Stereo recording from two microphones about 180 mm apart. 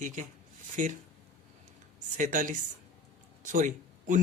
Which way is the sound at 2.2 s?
45° right (ahead or behind).